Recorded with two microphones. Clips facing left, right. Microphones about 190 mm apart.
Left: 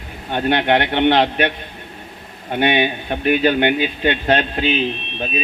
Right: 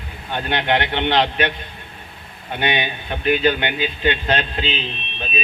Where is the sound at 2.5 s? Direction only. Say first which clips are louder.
Left 5 dB; 50° left (ahead or behind).